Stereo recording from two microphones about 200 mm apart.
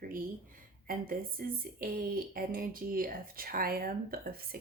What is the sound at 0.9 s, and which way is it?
Speech, 45° right (ahead or behind).